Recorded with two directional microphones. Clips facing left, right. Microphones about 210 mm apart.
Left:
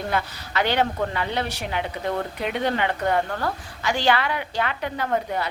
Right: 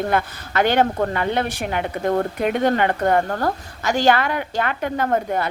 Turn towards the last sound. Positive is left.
turn(degrees=-50)  # may be behind; listen again after turning